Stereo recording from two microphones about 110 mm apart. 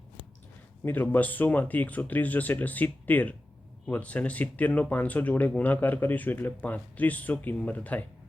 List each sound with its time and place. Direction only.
0.9 s speech: 15° left (ahead or behind)